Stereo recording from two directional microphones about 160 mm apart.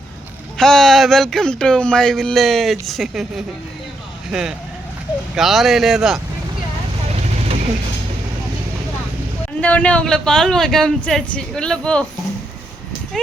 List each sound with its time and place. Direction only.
0.5 s speech: centre (ahead or behind)
7.2 s vehicle: 40° right (ahead or behind)
9.6 s speech: 10° left (ahead or behind)